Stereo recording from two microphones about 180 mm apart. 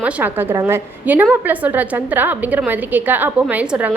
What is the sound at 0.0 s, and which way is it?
A woman's voice, 10° right (ahead or behind).